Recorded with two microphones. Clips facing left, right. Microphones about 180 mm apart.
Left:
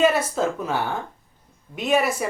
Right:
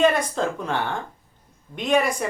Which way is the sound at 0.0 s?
5° left (ahead or behind).